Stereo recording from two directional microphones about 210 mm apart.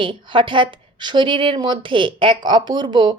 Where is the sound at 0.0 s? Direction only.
25° right (ahead or behind).